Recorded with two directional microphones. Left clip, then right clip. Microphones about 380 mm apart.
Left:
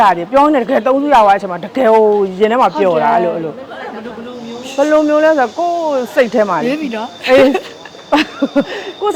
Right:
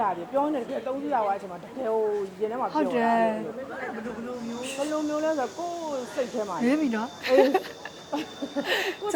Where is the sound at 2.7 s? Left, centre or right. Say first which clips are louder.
Left 12 dB; right.